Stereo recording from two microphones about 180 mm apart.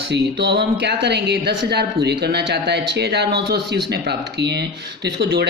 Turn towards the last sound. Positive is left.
turn(degrees=-65)  # may be behind; listen again after turning